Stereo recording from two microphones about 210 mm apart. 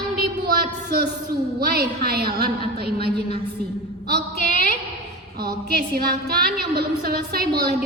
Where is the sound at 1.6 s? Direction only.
45° right (ahead or behind).